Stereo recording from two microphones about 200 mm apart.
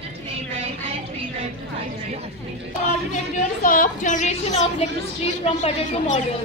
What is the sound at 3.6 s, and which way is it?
A woman's voice, 45° left (ahead or behind).